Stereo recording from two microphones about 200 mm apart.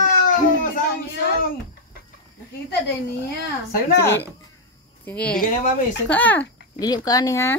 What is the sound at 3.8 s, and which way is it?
Speech, 50° left (ahead or behind).